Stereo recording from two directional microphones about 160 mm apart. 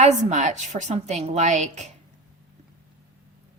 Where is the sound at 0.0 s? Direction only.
50° right (ahead or behind).